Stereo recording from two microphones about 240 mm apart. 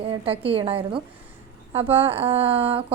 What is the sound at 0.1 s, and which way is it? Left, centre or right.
A woman's voice, right.